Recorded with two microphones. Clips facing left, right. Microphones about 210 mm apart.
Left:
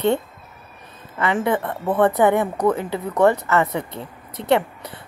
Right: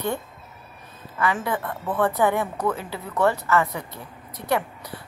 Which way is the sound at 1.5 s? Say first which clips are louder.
Left 6 dB; 25° left (ahead or behind).